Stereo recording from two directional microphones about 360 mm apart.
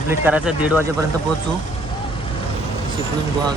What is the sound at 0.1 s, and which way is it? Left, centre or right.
Speech, centre.